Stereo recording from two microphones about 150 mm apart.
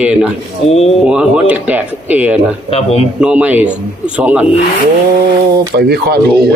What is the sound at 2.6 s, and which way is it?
Speech, 40° left (ahead or behind).